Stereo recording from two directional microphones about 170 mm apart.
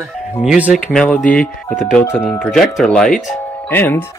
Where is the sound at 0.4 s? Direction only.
5° right (ahead or behind).